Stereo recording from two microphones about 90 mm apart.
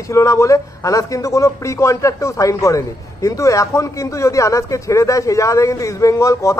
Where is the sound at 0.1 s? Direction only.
35° left (ahead or behind).